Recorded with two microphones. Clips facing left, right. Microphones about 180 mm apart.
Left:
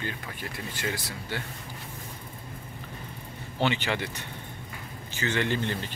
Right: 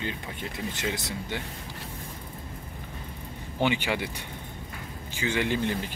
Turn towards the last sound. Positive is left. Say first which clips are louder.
# right 1 dB
turn(degrees=-10)  # may be behind; listen again after turning